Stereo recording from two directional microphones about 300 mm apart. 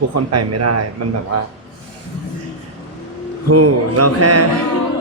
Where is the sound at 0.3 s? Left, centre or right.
Right.